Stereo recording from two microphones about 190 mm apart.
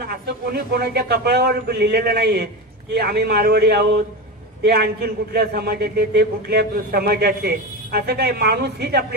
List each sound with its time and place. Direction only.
0.1 s a man's voice: 55° right (ahead or behind)